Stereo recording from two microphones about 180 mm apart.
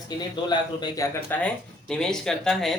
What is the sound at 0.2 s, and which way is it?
Speech, 25° left (ahead or behind).